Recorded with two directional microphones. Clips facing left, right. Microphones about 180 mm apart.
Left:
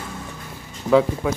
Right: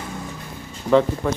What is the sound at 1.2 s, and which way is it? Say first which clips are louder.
Speech: even; 5° left (ahead or behind).